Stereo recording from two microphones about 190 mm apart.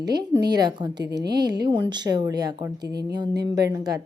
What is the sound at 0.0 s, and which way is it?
A woman's voice, 20° right (ahead or behind).